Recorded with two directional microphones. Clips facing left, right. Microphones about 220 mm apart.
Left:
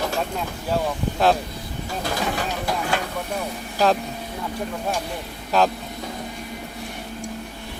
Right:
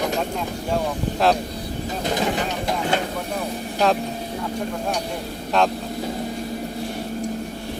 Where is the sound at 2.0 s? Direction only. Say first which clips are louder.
Right 3 dB; 20° right (ahead or behind).